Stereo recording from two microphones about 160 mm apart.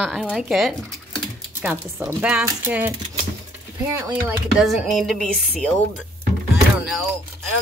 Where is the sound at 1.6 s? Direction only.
15° right (ahead or behind).